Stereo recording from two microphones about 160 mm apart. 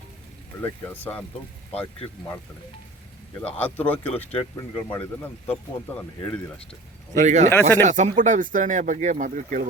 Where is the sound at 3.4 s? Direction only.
10° left (ahead or behind).